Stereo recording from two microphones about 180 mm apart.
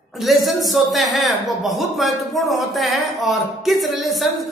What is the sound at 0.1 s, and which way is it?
A man's voice, centre (ahead or behind).